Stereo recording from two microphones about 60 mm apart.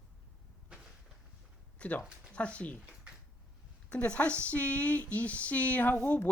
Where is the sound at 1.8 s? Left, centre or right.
Left.